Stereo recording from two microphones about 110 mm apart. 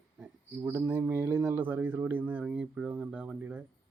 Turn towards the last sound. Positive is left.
turn(degrees=-10)  # may be behind; listen again after turning